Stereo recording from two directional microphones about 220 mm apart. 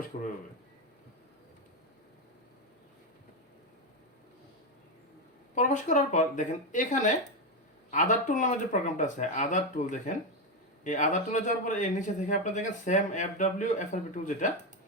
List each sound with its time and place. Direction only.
0.1 s speech: 35° left (ahead or behind)
5.5 s speech: 35° left (ahead or behind)